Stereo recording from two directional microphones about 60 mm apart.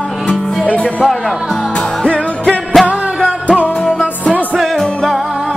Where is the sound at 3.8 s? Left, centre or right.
Centre.